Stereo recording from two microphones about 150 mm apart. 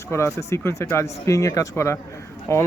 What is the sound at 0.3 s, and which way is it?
Speech, 20° left (ahead or behind).